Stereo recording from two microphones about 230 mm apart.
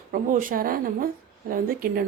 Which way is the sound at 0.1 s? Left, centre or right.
Right.